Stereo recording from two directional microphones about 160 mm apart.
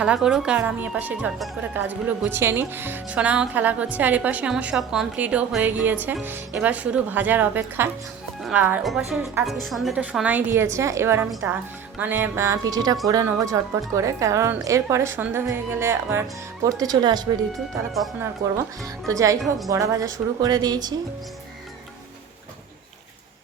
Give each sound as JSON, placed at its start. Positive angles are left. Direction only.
{"t": 0.0, "sound": "a woman's voice", "side_deg": -5}
{"t": 19.0, "sound": "speech", "side_deg": -20}